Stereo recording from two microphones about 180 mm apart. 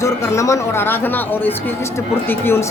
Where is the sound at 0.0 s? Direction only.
15° left (ahead or behind).